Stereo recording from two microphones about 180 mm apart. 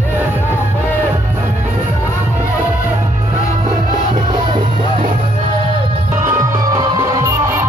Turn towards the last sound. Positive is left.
turn(degrees=-15)  # may be behind; listen again after turning